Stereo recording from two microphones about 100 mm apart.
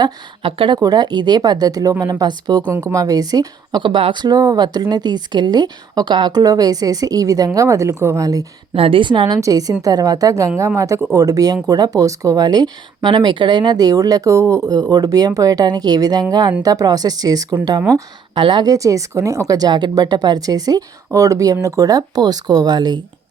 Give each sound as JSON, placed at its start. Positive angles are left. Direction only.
{"t": 0.4, "sound": "a woman's voice", "side_deg": -60}
{"t": 0.8, "sound": "speech", "side_deg": -45}
{"t": 8.7, "sound": "a woman's voice", "side_deg": -65}
{"t": 9.4, "sound": "speech", "side_deg": -40}
{"t": 18.3, "sound": "speech", "side_deg": -50}